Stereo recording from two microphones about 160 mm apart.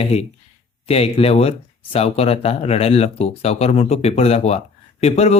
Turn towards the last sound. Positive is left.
turn(degrees=40)  # may be behind; listen again after turning